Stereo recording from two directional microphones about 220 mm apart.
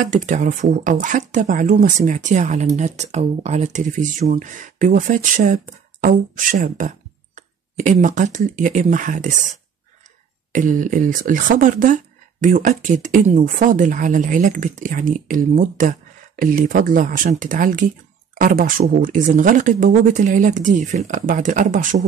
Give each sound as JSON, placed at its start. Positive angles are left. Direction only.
{"t": 0.0, "sound": "speech", "side_deg": -35}
{"t": 10.5, "sound": "speech", "side_deg": -35}